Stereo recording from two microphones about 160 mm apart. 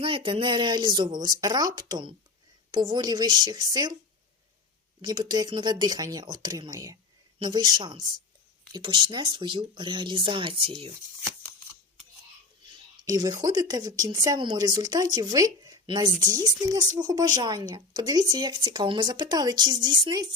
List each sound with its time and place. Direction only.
0.0 s speech: 35° right (ahead or behind)
5.0 s speech: 25° right (ahead or behind)
12.6 s speech: 25° right (ahead or behind)